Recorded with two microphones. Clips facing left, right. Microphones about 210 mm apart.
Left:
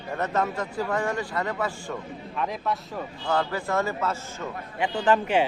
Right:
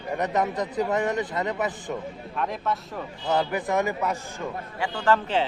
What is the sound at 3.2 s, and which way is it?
Speech, 20° right (ahead or behind).